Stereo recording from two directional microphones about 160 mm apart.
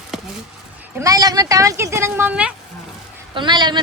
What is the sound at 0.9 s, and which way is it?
Speech, 20° right (ahead or behind).